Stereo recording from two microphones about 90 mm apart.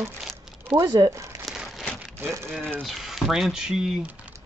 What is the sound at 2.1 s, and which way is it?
Speech, 25° right (ahead or behind).